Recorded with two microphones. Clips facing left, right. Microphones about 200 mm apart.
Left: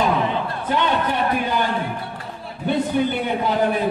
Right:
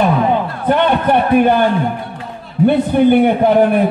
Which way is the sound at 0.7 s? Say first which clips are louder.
Right 9 dB; 60° right (ahead or behind).